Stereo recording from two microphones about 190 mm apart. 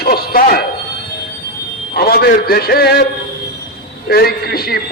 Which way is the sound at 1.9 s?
55° left (ahead or behind).